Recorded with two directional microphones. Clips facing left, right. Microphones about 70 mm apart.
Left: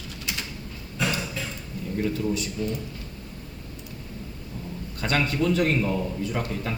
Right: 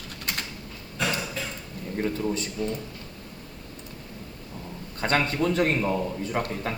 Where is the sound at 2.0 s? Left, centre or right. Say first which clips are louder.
Left 1 dB; right.